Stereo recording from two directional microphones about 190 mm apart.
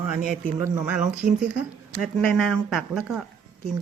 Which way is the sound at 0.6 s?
10° right (ahead or behind).